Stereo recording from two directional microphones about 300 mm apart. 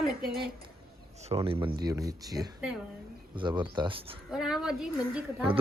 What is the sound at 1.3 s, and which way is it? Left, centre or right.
Speech, centre.